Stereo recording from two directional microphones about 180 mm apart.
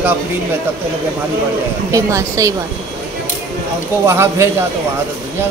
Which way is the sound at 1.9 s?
15° right (ahead or behind).